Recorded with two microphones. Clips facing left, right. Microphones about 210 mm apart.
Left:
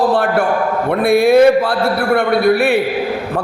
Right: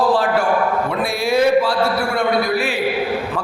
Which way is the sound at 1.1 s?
55° left (ahead or behind).